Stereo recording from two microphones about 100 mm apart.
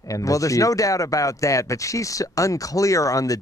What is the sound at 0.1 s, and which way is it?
Speech, 35° left (ahead or behind).